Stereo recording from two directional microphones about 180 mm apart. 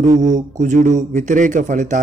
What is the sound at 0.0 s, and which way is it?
Speech, 45° right (ahead or behind).